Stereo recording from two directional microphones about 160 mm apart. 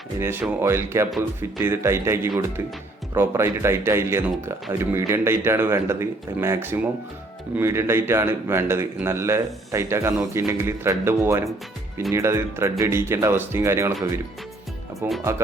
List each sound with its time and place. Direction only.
0.2 s a man's voice: 15° right (ahead or behind)